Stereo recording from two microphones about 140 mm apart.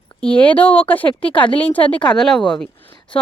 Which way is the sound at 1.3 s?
35° left (ahead or behind).